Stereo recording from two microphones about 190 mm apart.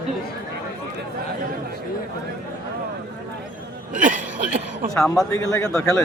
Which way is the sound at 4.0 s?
45° right (ahead or behind).